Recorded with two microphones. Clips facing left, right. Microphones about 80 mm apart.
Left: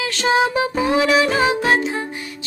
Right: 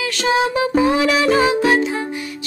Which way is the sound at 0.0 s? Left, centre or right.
Left.